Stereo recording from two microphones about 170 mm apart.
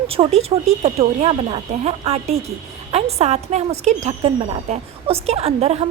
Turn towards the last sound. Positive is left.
turn(degrees=-40)  # may be behind; listen again after turning